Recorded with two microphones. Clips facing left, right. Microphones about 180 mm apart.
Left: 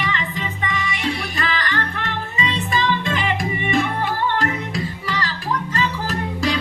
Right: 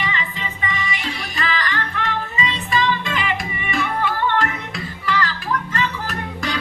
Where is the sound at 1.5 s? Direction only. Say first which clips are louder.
Right 1 dB; 45° left (ahead or behind).